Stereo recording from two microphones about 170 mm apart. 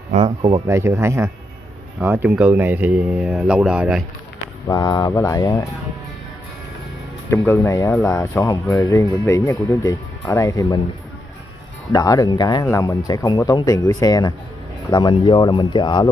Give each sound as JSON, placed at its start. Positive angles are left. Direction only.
{"t": 0.1, "sound": "speech", "side_deg": -35}
{"t": 0.7, "sound": "speech", "side_deg": -15}
{"t": 4.6, "sound": "speech", "side_deg": 25}
{"t": 7.2, "sound": "speech", "side_deg": 15}
{"t": 11.9, "sound": "speech", "side_deg": 20}